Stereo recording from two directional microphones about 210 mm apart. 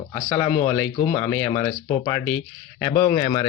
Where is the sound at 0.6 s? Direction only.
25° left (ahead or behind).